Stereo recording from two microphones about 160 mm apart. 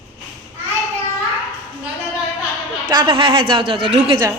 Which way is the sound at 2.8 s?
30° right (ahead or behind).